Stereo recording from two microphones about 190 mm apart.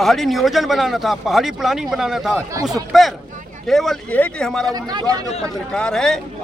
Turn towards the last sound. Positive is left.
turn(degrees=5)  # may be behind; listen again after turning